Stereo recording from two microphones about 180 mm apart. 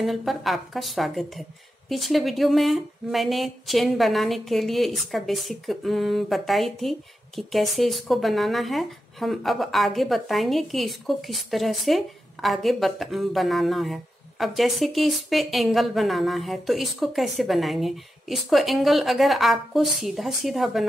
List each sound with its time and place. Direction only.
0.0 s speech: centre (ahead or behind)